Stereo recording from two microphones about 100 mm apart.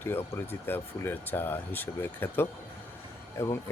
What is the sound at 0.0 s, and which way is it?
Speech, 20° left (ahead or behind).